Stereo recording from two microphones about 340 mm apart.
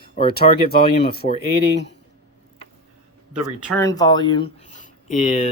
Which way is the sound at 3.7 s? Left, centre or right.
Centre.